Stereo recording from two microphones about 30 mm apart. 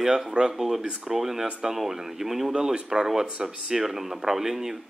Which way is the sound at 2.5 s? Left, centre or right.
Right.